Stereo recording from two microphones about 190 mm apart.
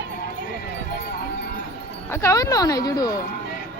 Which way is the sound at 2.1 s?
15° left (ahead or behind).